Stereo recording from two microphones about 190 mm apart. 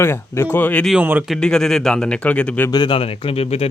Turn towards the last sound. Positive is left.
turn(degrees=30)  # may be behind; listen again after turning